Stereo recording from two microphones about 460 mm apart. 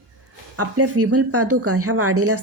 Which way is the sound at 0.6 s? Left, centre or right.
Right.